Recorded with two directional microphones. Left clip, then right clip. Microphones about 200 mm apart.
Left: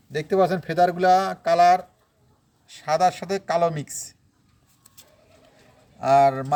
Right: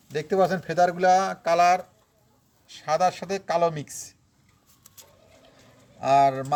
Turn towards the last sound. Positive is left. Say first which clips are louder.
# left 2 dB
turn(degrees=10)  # may be behind; listen again after turning